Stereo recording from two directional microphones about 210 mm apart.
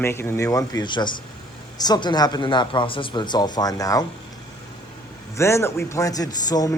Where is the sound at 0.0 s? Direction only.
10° left (ahead or behind).